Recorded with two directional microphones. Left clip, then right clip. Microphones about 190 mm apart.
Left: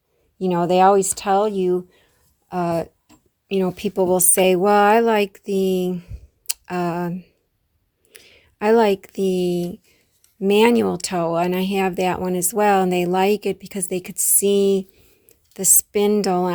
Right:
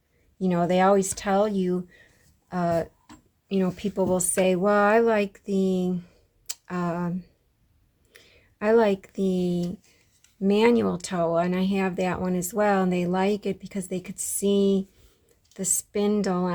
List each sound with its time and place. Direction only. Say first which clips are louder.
0.3 s speech: left 6 dB; 30° left (ahead or behind)
6.5 s a sound: left 6 dB; 35° left (ahead or behind)
8.1 s speech: left 6 dB; 35° left (ahead or behind)